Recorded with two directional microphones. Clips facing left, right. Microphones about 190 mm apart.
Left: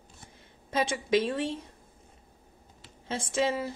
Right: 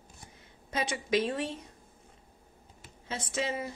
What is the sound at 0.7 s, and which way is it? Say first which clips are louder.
Speech: left 4 dB; 25° left (ahead or behind).